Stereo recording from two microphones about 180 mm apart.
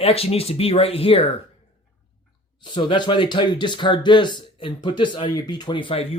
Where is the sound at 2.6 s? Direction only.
25° left (ahead or behind).